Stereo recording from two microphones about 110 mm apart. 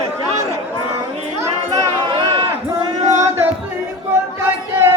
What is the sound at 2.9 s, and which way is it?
Male singing, 90° right.